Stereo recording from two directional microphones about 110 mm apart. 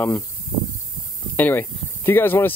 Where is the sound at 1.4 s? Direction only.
20° left (ahead or behind).